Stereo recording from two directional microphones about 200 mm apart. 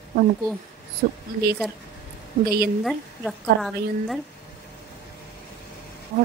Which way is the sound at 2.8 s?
Centre (ahead or behind).